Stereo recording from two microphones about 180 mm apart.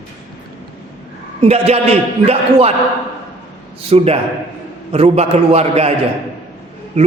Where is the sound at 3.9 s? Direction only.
35° right (ahead or behind).